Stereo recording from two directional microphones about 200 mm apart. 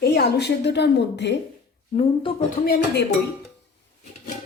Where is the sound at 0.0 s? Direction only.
50° left (ahead or behind).